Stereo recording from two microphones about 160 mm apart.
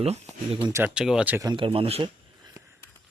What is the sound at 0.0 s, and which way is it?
Speech, 40° right (ahead or behind).